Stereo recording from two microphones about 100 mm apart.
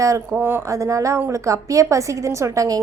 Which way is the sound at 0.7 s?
30° right (ahead or behind).